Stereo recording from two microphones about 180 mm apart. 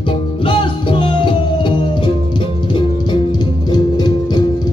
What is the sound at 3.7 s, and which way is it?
Music, 25° left (ahead or behind).